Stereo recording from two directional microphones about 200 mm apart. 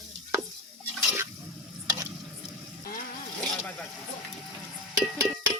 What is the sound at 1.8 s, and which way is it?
Stir, 15° right (ahead or behind).